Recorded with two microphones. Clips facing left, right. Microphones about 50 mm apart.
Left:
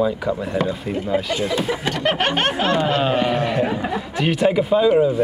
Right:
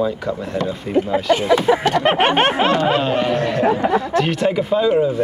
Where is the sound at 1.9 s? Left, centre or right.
Right.